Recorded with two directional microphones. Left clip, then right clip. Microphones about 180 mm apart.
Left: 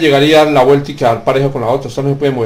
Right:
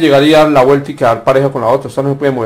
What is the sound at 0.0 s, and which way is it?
A man's voice, 30° right (ahead or behind).